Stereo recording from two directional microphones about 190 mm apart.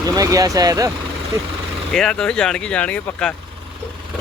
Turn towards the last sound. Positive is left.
turn(degrees=5)  # may be behind; listen again after turning